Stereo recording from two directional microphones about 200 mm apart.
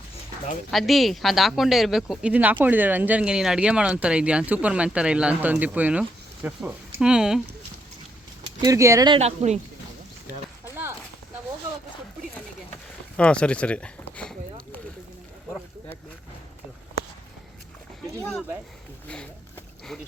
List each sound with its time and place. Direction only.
0.7 s speech: centre (ahead or behind)
8.6 s speech: 15° right (ahead or behind)
9.1 s speech: 35° right (ahead or behind)
10.7 s clip-clop: 10° right (ahead or behind)
13.1 s speech: 5° left (ahead or behind)
18.2 s speech: 5° left (ahead or behind)
19.0 s a sound: 5° left (ahead or behind)